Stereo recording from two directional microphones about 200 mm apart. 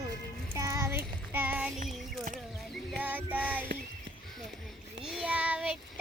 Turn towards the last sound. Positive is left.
turn(degrees=-5)  # may be behind; listen again after turning